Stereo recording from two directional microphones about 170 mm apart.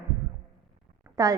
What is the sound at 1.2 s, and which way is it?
Speech, 20° right (ahead or behind).